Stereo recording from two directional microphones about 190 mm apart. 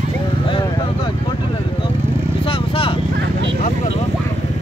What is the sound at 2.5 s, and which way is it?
Vehicle, 30° left (ahead or behind).